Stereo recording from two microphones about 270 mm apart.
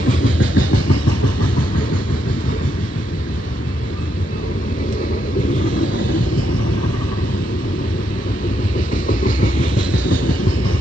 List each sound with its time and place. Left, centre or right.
0.6 s vehicle: left
5.7 s vehicle: left
8.7 s train: left